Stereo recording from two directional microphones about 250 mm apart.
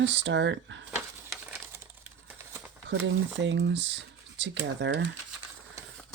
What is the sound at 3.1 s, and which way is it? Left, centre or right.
Speech, right.